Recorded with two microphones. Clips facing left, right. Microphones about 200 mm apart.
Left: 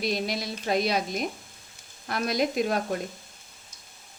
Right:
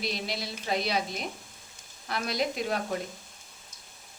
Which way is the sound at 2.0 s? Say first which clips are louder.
Left 4 dB; 50° left (ahead or behind).